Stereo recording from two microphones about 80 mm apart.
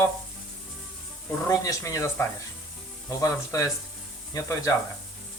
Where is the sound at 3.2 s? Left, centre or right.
Left.